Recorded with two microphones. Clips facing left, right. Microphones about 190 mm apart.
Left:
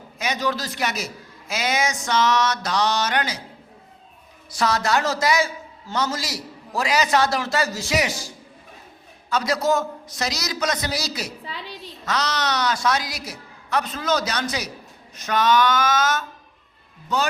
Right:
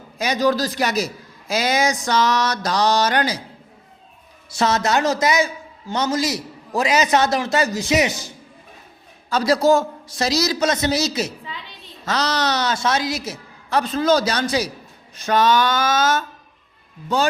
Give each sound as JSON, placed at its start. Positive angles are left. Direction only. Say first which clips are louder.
{"t": 0.2, "sound": "a man's voice", "louder": "right 6 dB", "side_deg": -35}
{"t": 4.5, "sound": "a man's voice", "louder": "right 3 dB", "side_deg": -25}
{"t": 9.3, "sound": "a man's voice", "louder": "right 5 dB", "side_deg": -30}